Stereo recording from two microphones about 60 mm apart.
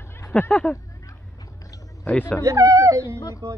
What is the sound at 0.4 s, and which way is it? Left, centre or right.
Speech, left.